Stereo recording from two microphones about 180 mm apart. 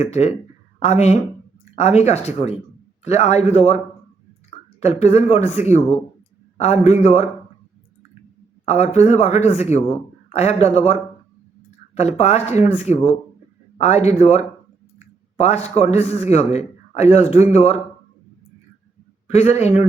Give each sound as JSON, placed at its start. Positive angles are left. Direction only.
{"t": 0.0, "sound": "speech", "side_deg": 35}
{"t": 4.8, "sound": "speech", "side_deg": 35}
{"t": 8.6, "sound": "speech", "side_deg": 35}
{"t": 11.9, "sound": "speech", "side_deg": 35}
{"t": 19.3, "sound": "speech", "side_deg": 35}